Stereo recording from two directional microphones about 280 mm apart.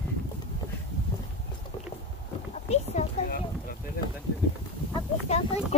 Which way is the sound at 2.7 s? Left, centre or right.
Left.